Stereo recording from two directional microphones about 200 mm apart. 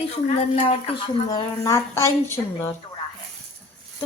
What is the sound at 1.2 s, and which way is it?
A woman's voice, 15° left (ahead or behind).